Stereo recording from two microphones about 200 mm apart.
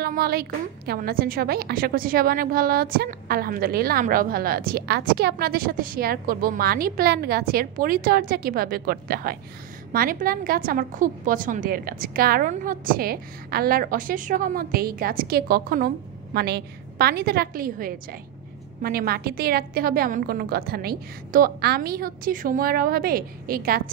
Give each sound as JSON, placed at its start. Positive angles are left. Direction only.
{"t": 0.0, "sound": "a woman's voice", "side_deg": -50}